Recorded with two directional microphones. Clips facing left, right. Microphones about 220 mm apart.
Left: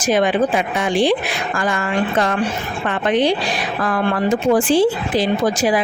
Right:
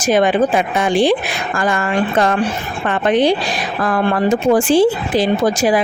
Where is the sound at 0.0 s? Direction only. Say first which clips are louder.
Right 3 dB; 45° right (ahead or behind).